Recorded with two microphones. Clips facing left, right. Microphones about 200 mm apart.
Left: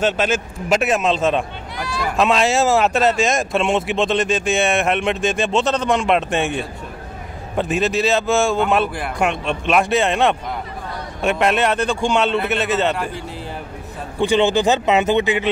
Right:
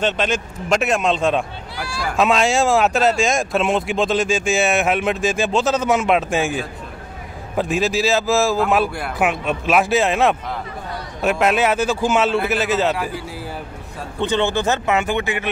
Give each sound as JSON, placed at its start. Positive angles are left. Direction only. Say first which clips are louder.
{"t": 0.0, "sound": "speech", "louder": "left 2 dB", "side_deg": 5}
{"t": 14.2, "sound": "speech", "louder": "left 4 dB", "side_deg": 15}